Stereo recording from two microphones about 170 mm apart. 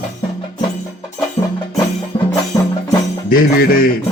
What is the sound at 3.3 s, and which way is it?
Music, 60° left (ahead or behind).